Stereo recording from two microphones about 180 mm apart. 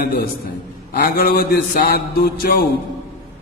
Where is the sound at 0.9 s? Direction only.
55° left (ahead or behind).